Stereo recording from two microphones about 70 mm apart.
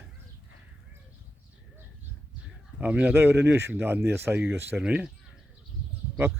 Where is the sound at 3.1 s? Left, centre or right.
Right.